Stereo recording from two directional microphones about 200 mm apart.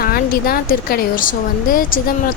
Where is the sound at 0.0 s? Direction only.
45° left (ahead or behind).